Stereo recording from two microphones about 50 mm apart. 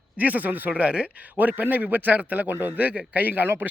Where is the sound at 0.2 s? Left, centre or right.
Right.